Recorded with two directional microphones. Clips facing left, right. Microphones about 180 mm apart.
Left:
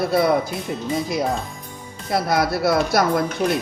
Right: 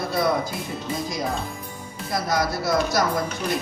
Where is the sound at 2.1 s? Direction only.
60° left (ahead or behind).